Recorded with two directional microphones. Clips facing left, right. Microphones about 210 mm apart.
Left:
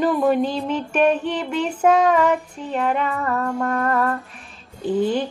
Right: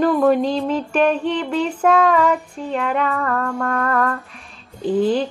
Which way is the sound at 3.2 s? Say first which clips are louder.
Right 1 dB; 20° left (ahead or behind).